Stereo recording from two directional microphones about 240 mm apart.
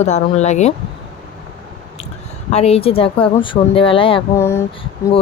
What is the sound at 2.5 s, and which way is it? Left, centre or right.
Speech, left.